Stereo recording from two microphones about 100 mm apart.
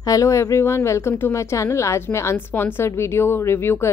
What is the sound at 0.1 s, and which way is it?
Speech, 35° left (ahead or behind).